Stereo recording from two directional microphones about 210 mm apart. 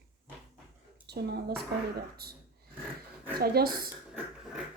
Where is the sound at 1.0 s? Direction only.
50° right (ahead or behind).